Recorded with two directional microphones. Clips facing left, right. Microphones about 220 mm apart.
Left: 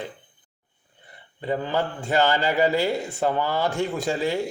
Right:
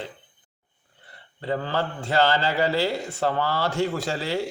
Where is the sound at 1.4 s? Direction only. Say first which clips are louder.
Left 1 dB; 15° left (ahead or behind).